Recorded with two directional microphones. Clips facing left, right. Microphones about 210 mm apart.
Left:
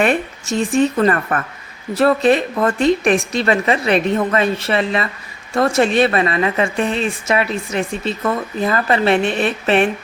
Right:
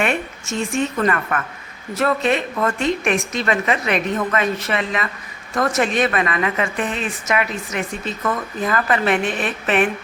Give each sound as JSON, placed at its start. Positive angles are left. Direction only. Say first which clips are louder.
{"t": 0.0, "sound": "a woman's voice", "louder": "left 5 dB", "side_deg": 35}